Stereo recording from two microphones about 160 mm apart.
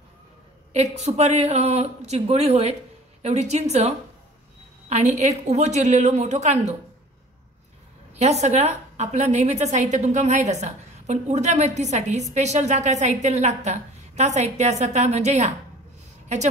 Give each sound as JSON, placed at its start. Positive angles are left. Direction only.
{"t": 0.7, "sound": "a woman's voice", "side_deg": -45}
{"t": 8.2, "sound": "a woman's voice", "side_deg": -45}